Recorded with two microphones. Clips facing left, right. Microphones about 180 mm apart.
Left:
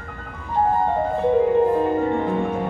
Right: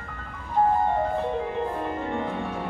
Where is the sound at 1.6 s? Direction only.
45° left (ahead or behind).